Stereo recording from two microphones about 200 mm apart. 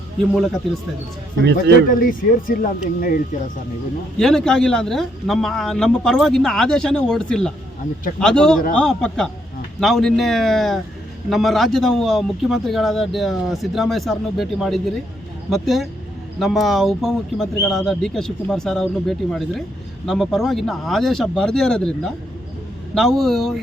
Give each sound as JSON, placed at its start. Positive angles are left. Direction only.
{"t": 0.3, "sound": "a man's voice", "side_deg": 0}
{"t": 1.9, "sound": "speech", "side_deg": 45}
{"t": 4.2, "sound": "a man's voice", "side_deg": 0}